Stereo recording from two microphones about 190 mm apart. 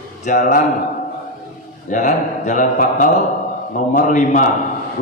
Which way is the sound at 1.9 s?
40° left (ahead or behind).